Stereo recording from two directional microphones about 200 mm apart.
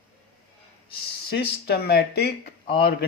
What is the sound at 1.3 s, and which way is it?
Speech, 50° left (ahead or behind).